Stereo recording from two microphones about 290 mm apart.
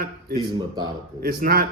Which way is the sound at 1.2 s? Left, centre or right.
Right.